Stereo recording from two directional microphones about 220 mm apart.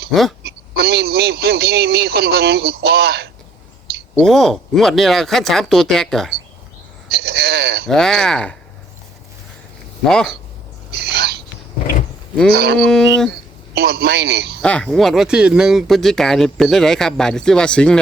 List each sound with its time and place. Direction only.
0.1 s speech: centre (ahead or behind)
0.8 s speech: 45° right (ahead or behind)
4.1 s speech: centre (ahead or behind)
7.1 s speech: 45° right (ahead or behind)
7.9 s speech: centre (ahead or behind)
10.1 s speech: centre (ahead or behind)
11.0 s owl: 45° right (ahead or behind)
12.5 s speech: 45° right (ahead or behind)
12.8 s speech: centre (ahead or behind)
13.7 s speech: 45° right (ahead or behind)
14.6 s speech: 5° left (ahead or behind)